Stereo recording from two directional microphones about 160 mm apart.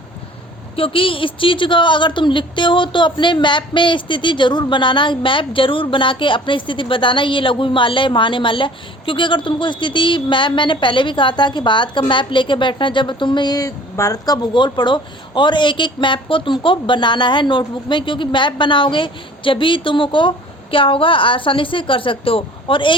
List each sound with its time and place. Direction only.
0.8 s a woman's voice: 35° left (ahead or behind)